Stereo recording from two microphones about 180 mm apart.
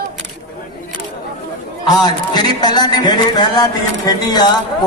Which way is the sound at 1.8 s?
25° left (ahead or behind).